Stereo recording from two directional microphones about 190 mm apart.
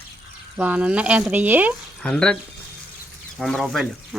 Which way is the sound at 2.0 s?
5° left (ahead or behind).